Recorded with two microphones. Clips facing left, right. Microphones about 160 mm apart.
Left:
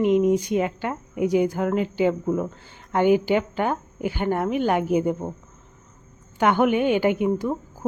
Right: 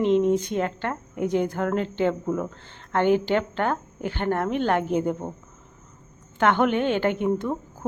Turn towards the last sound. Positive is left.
turn(degrees=10)  # may be behind; listen again after turning